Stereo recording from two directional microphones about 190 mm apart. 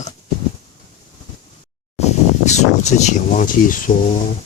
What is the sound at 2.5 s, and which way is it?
Speech, 35° left (ahead or behind).